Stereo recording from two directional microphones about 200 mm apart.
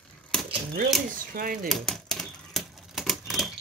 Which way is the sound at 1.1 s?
45° right (ahead or behind).